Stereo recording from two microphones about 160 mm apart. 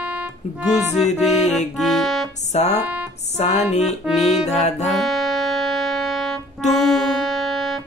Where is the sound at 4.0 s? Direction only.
Centre (ahead or behind).